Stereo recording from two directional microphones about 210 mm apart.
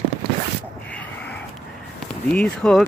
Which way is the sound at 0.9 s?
5° left (ahead or behind).